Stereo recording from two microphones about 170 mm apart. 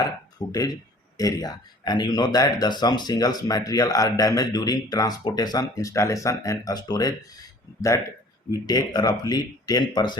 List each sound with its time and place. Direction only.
0.3 s speech: 20° left (ahead or behind)
8.6 s speech: 25° left (ahead or behind)